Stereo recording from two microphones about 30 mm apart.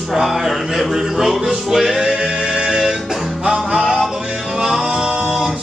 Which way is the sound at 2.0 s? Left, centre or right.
Right.